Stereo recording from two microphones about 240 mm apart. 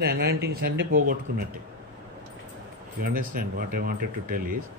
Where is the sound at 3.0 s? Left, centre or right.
Right.